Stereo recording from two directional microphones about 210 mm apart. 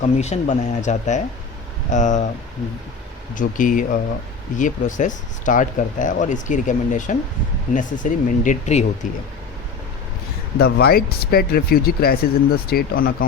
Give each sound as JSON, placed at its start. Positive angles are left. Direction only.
{"t": 0.0, "sound": "speech", "side_deg": 35}
{"t": 3.3, "sound": "speech", "side_deg": 40}
{"t": 10.6, "sound": "speech", "side_deg": 45}